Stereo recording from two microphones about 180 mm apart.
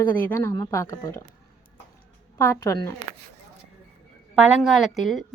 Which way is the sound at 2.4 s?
15° left (ahead or behind).